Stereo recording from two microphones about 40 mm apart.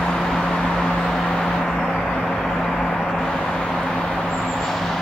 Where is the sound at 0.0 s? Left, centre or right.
Centre.